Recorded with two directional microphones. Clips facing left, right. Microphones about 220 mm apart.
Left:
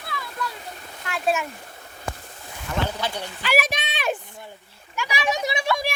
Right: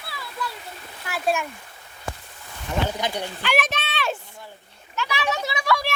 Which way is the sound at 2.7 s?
15° right (ahead or behind).